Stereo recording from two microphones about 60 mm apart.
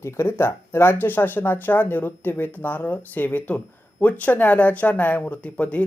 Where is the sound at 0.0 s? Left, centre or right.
Left.